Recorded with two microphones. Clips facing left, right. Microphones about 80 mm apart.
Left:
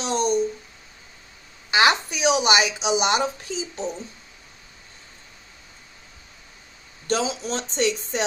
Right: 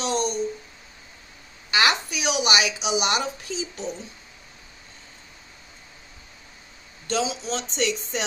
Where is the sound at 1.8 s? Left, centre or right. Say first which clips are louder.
Left 4 dB; left.